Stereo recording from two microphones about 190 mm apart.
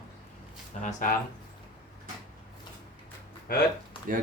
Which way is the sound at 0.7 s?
35° left (ahead or behind).